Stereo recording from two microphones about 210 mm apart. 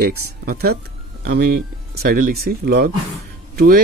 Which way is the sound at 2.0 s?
40° right (ahead or behind).